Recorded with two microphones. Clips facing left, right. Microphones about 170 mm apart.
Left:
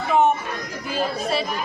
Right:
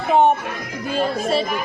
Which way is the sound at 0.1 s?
30° right (ahead or behind).